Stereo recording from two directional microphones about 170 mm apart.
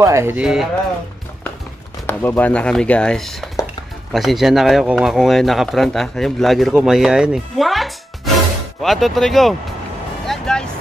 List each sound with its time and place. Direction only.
0.0 s speech: 15° right (ahead or behind)
0.4 s speech: 5° right (ahead or behind)
2.0 s speech: 10° left (ahead or behind)
10.2 s vehicle: 5° left (ahead or behind)